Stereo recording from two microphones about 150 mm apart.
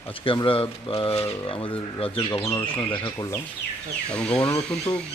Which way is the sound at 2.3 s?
20° left (ahead or behind).